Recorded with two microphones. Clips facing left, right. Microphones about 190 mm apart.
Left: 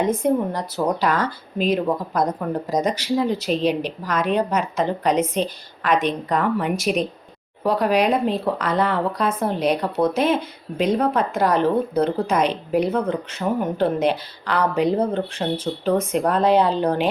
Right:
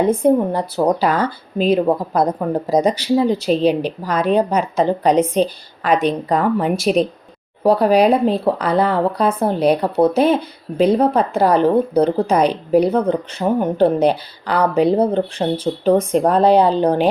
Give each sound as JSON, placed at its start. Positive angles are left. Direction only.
{"t": 0.0, "sound": "speech", "side_deg": -30}